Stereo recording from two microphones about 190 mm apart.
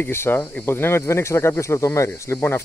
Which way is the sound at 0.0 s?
10° left (ahead or behind).